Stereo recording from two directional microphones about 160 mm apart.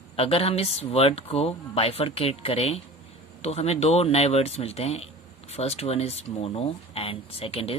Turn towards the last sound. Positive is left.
turn(degrees=40)  # may be behind; listen again after turning